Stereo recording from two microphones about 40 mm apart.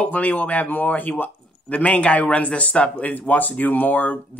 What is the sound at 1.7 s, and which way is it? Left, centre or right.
A man's voice, left.